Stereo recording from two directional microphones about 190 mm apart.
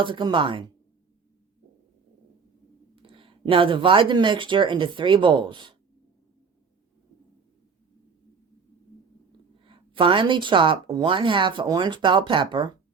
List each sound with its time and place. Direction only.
0.0 s speech: 25° right (ahead or behind)
2.9 s speech: 25° right (ahead or behind)
9.6 s speech: 25° right (ahead or behind)